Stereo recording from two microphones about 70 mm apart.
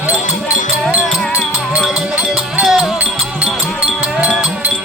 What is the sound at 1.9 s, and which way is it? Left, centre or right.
Music, centre.